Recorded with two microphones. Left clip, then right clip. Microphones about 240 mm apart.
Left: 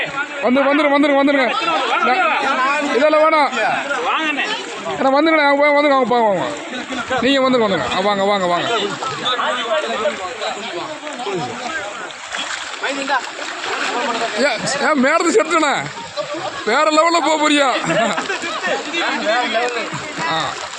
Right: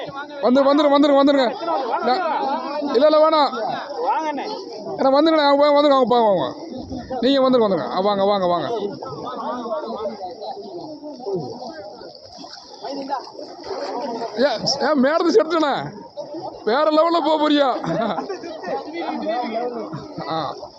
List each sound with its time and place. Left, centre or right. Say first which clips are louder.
0.4 s speech: even; centre
1.4 s chatter: left 4 dB; left
2.1 s a sound: left 5 dB; left
2.9 s speech: even; centre
4.9 s speech: left 2 dB; centre
14.3 s speech: right 2 dB; centre
18.9 s chatter: left 7 dB; left